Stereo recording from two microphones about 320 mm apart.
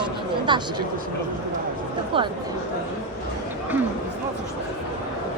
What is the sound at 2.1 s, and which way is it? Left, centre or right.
Speech, centre.